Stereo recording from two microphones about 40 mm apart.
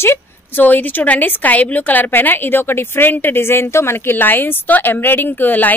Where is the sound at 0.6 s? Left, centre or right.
Left.